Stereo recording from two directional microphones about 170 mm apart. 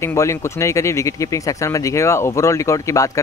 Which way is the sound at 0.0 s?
15° left (ahead or behind).